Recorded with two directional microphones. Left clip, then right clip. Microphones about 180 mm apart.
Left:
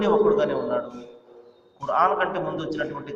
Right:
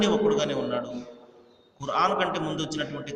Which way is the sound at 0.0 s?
35° right (ahead or behind).